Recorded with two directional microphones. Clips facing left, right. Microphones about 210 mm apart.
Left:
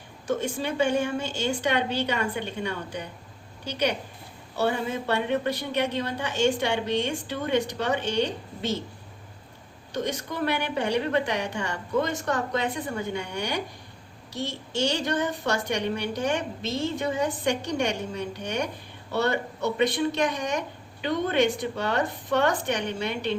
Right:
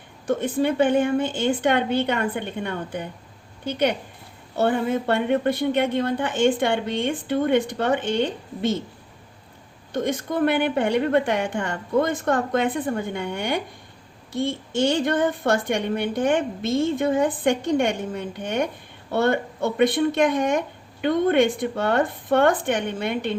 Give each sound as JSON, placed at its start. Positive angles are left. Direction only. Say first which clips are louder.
{"t": 0.3, "sound": "a woman's voice", "louder": "right 6 dB", "side_deg": -55}
{"t": 9.9, "sound": "a woman's voice", "louder": "right 6 dB", "side_deg": -50}